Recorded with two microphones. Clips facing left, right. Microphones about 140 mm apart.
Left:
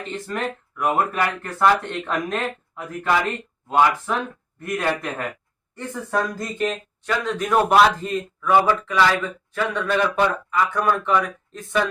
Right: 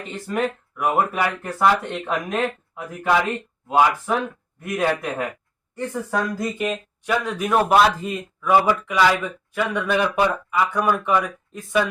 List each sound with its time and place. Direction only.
0.1 s speech: 5° right (ahead or behind)